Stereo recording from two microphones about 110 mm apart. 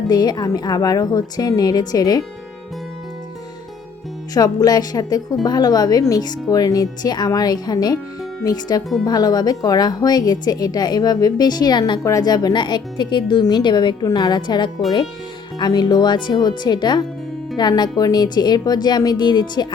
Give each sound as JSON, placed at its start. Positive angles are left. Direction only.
{"t": 0.1, "sound": "a woman's voice", "side_deg": 40}
{"t": 4.4, "sound": "a woman's voice", "side_deg": 35}